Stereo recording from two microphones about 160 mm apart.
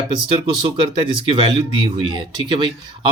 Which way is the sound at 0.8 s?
35° right (ahead or behind).